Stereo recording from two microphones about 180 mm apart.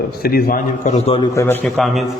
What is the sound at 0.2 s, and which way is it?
A man's voice, 55° left (ahead or behind).